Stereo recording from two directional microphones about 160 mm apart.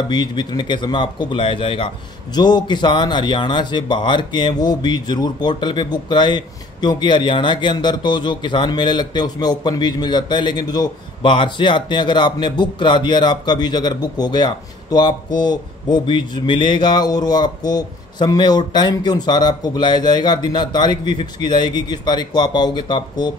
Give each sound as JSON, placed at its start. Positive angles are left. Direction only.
{"t": 0.1, "sound": "speech", "side_deg": 25}